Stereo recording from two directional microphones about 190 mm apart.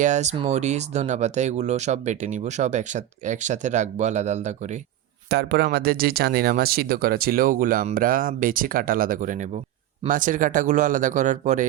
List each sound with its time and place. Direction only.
0.0 s speech: 40° right (ahead or behind)
5.3 s speech: 55° right (ahead or behind); by 11.6 s 40° right (ahead or behind)